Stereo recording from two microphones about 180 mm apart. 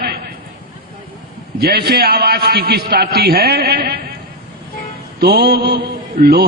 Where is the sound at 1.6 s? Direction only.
60° right (ahead or behind).